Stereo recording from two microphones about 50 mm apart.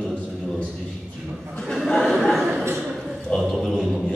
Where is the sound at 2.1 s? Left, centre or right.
Centre.